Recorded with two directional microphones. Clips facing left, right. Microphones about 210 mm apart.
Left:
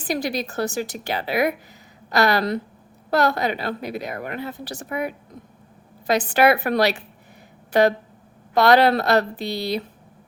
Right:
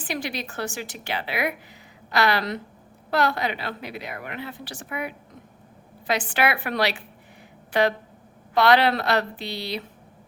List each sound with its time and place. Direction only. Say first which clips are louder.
0.0 s a woman's voice: left 6 dB; 40° left (ahead or behind)